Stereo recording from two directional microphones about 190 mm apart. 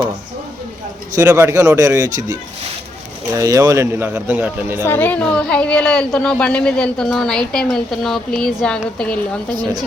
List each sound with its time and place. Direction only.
1.1 s speech: 15° right (ahead or behind)
4.9 s a woman's voice: 10° left (ahead or behind)